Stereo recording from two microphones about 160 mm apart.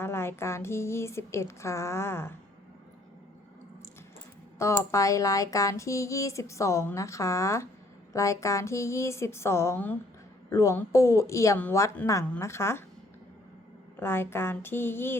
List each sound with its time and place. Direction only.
0.0 s speech: 15° left (ahead or behind)
4.5 s speech: 20° left (ahead or behind)
14.0 s speech: 15° left (ahead or behind)